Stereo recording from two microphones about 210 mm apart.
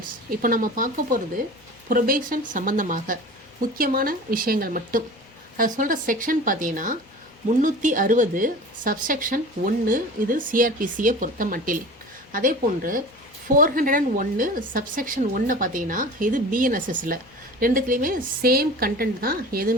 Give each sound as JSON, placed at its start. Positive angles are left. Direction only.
{"t": 0.3, "sound": "a woman's voice", "side_deg": -40}